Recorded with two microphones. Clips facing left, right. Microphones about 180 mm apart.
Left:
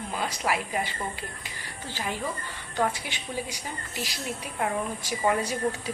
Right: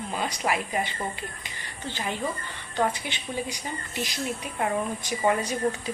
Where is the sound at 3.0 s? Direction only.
10° left (ahead or behind).